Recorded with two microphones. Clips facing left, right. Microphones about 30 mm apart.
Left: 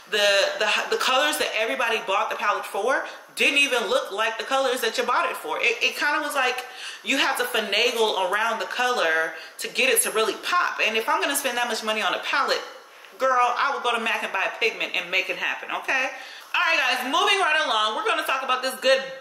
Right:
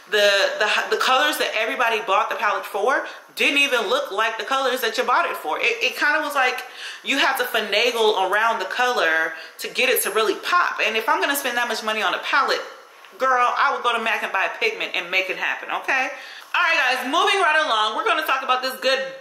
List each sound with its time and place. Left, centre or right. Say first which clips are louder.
0.1 s speech: right 3 dB; centre